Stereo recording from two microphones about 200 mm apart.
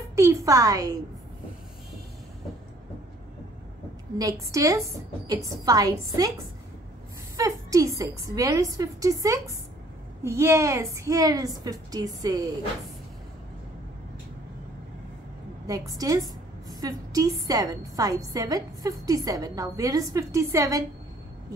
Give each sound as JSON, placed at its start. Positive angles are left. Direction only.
{"t": 0.1, "sound": "a woman's voice", "side_deg": -15}
{"t": 4.2, "sound": "a woman's voice", "side_deg": -15}
{"t": 7.3, "sound": "a woman's voice", "side_deg": -15}
{"t": 15.9, "sound": "a woman's voice", "side_deg": -15}